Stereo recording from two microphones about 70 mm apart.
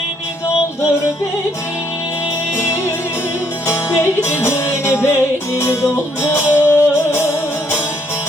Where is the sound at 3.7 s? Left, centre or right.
Left.